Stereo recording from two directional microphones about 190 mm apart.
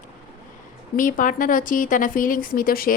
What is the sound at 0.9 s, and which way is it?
A woman's voice, 45° left (ahead or behind).